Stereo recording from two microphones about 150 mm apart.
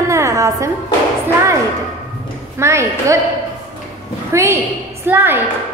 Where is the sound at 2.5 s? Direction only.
20° right (ahead or behind).